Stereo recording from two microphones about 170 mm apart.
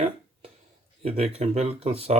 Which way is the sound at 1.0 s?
35° right (ahead or behind).